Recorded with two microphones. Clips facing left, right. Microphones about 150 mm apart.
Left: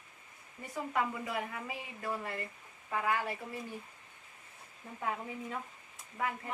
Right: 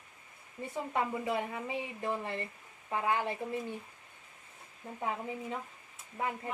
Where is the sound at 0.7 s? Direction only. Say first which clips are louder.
Right 1 dB; 25° right (ahead or behind).